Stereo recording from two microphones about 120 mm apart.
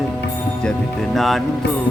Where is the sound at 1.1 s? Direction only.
Centre (ahead or behind).